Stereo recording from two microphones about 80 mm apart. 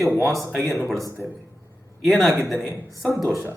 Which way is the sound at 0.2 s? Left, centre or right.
Centre.